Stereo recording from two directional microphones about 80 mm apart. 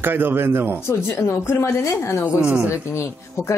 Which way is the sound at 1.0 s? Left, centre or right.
Left.